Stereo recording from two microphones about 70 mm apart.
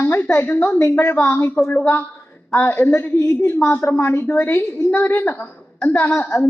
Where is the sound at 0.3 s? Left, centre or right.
Left.